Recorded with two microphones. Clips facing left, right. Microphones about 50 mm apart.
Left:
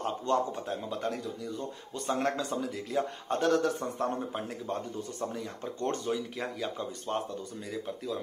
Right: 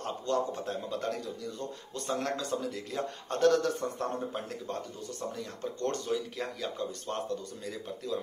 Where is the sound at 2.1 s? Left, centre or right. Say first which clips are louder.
Left 2 dB; left.